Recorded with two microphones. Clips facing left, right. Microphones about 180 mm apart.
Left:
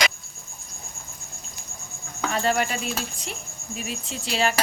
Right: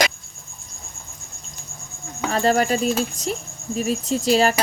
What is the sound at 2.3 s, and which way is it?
Speech, 40° right (ahead or behind).